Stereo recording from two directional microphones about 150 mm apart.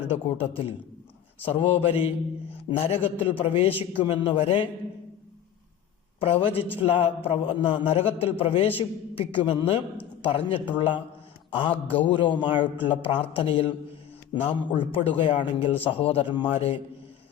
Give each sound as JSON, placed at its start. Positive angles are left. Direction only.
{"t": 0.1, "sound": "a man's voice", "side_deg": 40}
{"t": 6.1, "sound": "a man's voice", "side_deg": 40}